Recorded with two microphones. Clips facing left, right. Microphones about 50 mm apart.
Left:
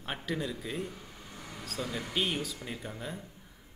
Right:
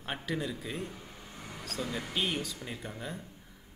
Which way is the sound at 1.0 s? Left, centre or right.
Centre.